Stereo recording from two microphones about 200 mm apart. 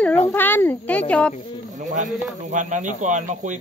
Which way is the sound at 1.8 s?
40° right (ahead or behind).